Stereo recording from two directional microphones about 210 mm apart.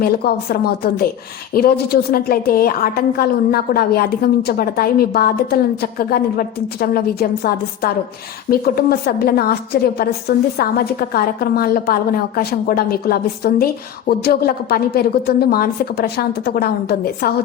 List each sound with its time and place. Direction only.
0.0 s a woman's voice: 50° left (ahead or behind)